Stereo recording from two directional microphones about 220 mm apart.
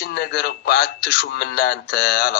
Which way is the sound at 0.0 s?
45° left (ahead or behind).